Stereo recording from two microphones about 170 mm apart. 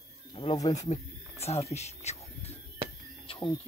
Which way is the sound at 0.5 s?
20° left (ahead or behind).